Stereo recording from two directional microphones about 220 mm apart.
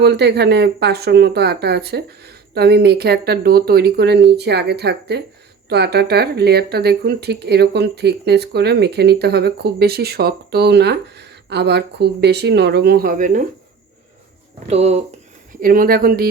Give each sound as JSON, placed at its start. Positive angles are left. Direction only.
{"t": 0.0, "sound": "speech", "side_deg": -50}
{"t": 14.7, "sound": "speech", "side_deg": -30}
{"t": 15.6, "sound": "speech", "side_deg": -40}